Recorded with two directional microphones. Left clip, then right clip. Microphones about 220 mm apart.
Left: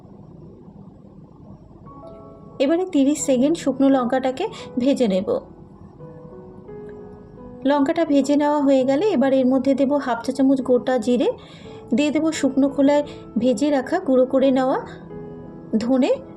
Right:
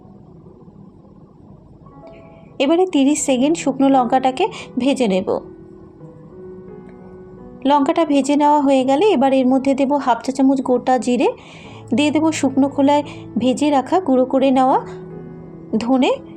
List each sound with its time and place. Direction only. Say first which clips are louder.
2.6 s a woman's voice: right 4 dB; 25° right (ahead or behind)
7.6 s a woman's voice: right 4 dB; 20° right (ahead or behind)